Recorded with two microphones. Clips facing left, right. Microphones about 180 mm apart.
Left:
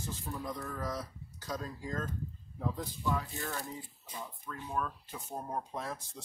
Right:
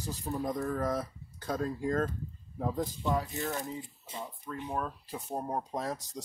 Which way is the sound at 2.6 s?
45° right (ahead or behind).